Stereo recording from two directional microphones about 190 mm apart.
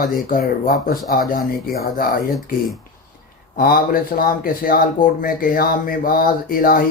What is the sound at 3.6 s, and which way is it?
Speech, 50° left (ahead or behind).